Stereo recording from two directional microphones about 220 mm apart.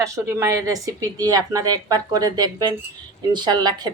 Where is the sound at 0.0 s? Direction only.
15° right (ahead or behind).